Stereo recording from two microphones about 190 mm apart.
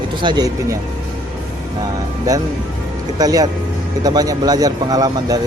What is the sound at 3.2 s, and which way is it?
Speech, 20° right (ahead or behind).